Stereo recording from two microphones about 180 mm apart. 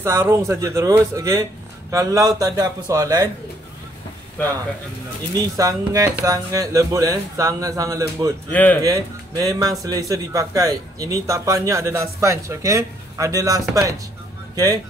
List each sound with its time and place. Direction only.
0.0 s speech: 15° right (ahead or behind)
5.6 s speech: 20° right (ahead or behind)
8.5 s speech: 10° left (ahead or behind)
8.8 s speech: 20° right (ahead or behind)